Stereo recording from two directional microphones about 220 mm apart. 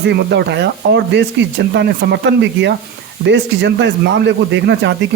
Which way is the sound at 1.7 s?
50° right (ahead or behind).